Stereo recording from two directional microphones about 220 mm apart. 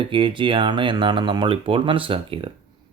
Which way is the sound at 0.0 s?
25° right (ahead or behind).